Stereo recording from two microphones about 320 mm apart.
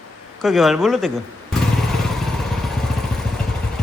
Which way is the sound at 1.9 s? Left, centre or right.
Centre.